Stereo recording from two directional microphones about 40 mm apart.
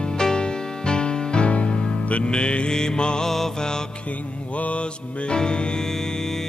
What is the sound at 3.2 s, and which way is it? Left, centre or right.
Mantra, centre.